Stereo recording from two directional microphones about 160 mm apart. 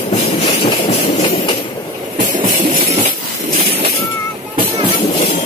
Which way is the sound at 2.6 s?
40° right (ahead or behind).